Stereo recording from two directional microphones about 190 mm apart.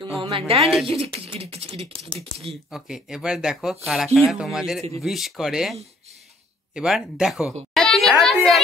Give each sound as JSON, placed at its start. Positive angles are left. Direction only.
{"t": 0.2, "sound": "a woman's voice", "side_deg": -25}
{"t": 2.7, "sound": "speech", "side_deg": -5}
{"t": 7.7, "sound": "a sound", "side_deg": 0}